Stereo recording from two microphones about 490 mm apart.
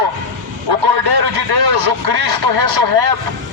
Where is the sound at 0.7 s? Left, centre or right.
Right.